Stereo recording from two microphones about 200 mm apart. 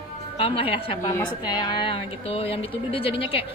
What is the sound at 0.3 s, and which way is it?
A woman's voice, 30° left (ahead or behind).